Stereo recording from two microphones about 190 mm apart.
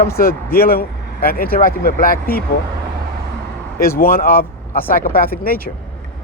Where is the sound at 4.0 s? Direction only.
50° left (ahead or behind).